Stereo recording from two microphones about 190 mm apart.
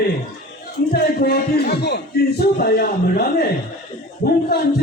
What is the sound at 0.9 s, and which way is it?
A man's voice, 55° left (ahead or behind).